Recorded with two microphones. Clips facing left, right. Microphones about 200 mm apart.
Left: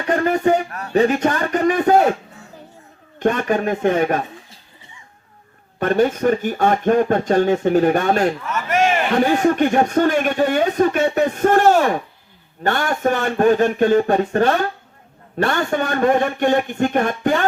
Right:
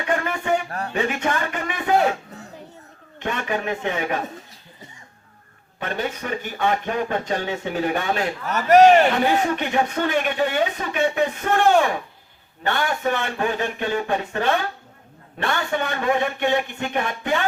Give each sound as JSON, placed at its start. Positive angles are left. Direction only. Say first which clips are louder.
{"t": 0.1, "sound": "a man's voice", "louder": "left 7 dB", "side_deg": 40}
{"t": 3.2, "sound": "speech", "louder": "left 8 dB", "side_deg": 45}
{"t": 5.8, "sound": "speech", "louder": "left 11 dB", "side_deg": 45}
{"t": 8.4, "sound": "a man's voice", "louder": "right 6 dB", "side_deg": -35}
{"t": 9.2, "sound": "speech", "louder": "left 5 dB", "side_deg": 45}